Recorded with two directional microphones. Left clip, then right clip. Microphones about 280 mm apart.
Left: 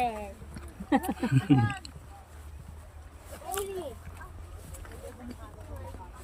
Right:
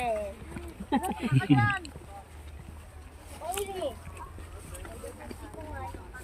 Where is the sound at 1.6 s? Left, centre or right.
Centre.